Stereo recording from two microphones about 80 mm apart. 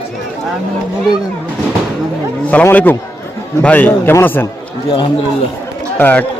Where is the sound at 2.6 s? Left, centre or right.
Left.